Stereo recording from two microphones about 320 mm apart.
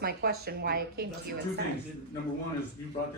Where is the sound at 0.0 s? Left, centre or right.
Right.